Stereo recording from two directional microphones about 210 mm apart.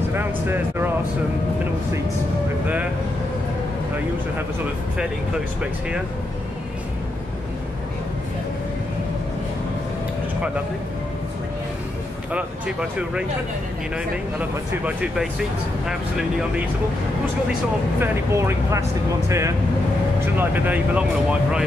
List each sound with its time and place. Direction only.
0.1 s speech: 10° right (ahead or behind)
5.6 s speech: 5° right (ahead or behind)
12.3 s speech: 5° right (ahead or behind)
17.5 s speech: 10° right (ahead or behind)